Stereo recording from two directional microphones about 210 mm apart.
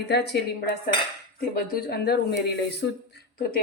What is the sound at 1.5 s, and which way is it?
Speech, 45° left (ahead or behind).